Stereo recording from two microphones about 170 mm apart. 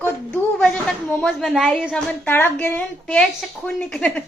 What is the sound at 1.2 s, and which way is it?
A woman's voice, centre (ahead or behind).